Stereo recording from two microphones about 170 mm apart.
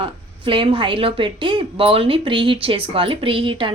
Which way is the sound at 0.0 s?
30° right (ahead or behind).